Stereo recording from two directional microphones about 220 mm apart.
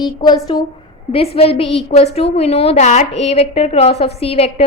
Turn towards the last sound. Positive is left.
turn(degrees=25)  # may be behind; listen again after turning